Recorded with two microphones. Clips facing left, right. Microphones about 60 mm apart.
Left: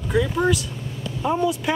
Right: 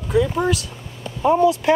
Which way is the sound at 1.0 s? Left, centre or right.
Right.